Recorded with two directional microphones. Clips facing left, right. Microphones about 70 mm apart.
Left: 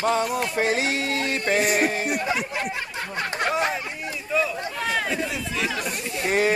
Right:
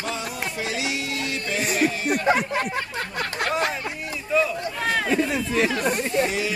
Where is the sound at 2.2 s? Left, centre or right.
Right.